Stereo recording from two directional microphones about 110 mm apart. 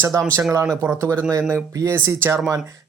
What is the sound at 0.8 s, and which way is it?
Speech, 25° right (ahead or behind).